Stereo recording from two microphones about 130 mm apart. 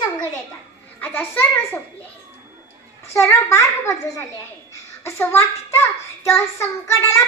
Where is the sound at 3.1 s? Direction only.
20° left (ahead or behind).